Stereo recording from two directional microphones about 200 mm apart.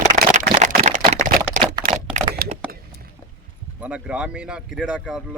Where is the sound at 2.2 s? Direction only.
35° right (ahead or behind).